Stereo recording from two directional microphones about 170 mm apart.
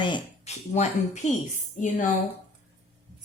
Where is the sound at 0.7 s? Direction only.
40° left (ahead or behind).